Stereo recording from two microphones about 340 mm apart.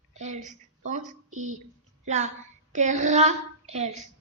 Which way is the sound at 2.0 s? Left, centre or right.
Centre.